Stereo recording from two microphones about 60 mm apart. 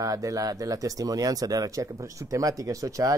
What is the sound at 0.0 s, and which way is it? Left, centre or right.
Speech, right.